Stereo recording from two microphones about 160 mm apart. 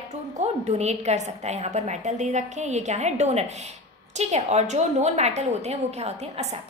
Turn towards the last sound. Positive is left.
turn(degrees=-45)  # may be behind; listen again after turning